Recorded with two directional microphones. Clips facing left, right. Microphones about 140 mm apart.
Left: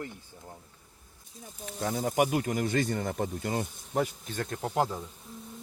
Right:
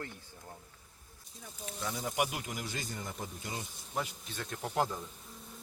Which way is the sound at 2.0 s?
45° left (ahead or behind).